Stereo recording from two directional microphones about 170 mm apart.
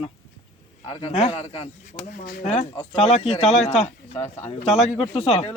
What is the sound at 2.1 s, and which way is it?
Speech, 50° left (ahead or behind).